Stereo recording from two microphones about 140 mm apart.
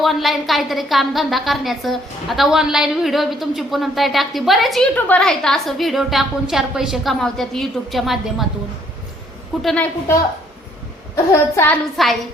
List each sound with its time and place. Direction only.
0.0 s a woman's voice: centre (ahead or behind)
9.6 s a woman's voice: centre (ahead or behind)
11.1 s a woman's voice: 20° left (ahead or behind)
12.0 s a woman's voice: centre (ahead or behind)